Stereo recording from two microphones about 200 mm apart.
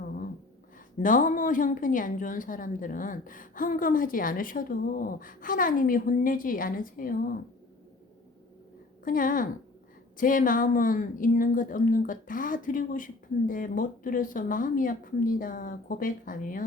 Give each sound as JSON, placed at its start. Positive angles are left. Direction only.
{"t": 0.9, "sound": "a woman's voice", "side_deg": 40}
{"t": 9.0, "sound": "a woman's voice", "side_deg": 45}